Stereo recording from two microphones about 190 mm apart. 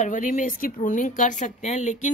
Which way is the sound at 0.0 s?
40° left (ahead or behind).